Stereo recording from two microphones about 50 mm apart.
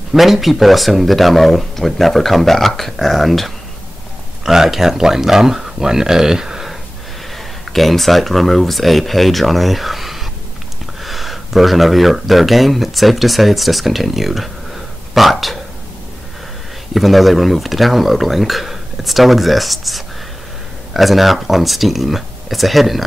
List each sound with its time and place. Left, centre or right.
0.1 s speech: centre
7.3 s speech: centre
16.9 s speech: centre